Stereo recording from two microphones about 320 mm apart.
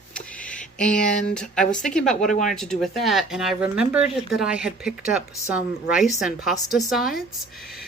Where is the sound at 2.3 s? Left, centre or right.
Left.